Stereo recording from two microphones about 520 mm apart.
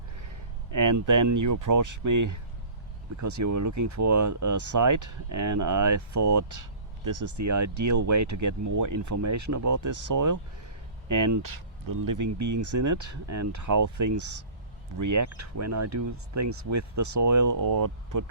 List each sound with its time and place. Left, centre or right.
0.7 s speech: right